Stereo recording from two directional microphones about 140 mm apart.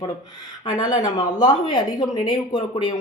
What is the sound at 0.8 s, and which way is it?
A woman's voice, 30° left (ahead or behind).